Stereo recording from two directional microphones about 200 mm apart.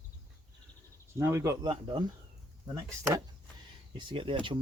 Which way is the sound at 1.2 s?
15° right (ahead or behind).